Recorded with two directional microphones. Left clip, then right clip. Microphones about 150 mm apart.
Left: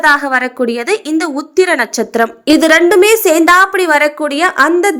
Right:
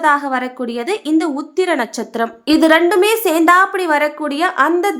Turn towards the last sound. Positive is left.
turn(degrees=25)  # may be behind; listen again after turning